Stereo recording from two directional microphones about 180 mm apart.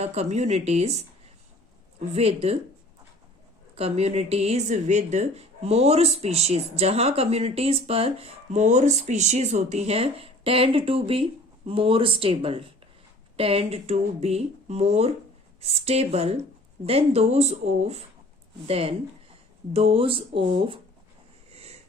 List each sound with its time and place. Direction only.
0.0 s speech: 35° right (ahead or behind)
3.8 s speech: 35° right (ahead or behind)
21.5 s a sound: 35° right (ahead or behind)